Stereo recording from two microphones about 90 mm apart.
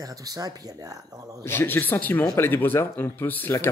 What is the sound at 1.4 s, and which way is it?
Speech, 25° left (ahead or behind).